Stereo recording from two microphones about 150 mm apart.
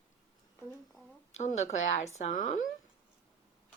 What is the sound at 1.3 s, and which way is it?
A woman's voice, 50° left (ahead or behind).